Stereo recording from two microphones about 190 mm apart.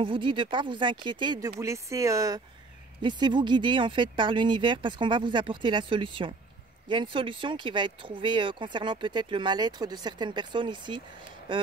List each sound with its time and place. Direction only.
0.0 s speech: 25° right (ahead or behind)